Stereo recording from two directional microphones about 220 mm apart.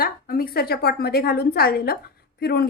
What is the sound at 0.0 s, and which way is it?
A woman's voice, 45° left (ahead or behind).